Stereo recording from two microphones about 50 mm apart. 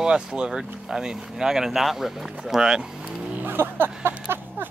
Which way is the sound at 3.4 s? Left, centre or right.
Right.